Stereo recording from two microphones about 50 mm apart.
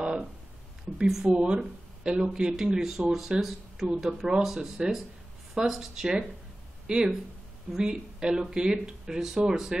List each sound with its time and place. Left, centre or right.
0.0 s a sound: centre
0.9 s speech: centre
1.2 s speech: centre